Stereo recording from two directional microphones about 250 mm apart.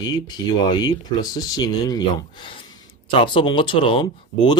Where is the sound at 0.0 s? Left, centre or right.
Centre.